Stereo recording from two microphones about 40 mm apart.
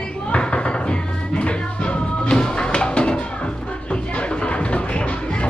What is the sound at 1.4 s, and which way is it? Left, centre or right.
Music, left.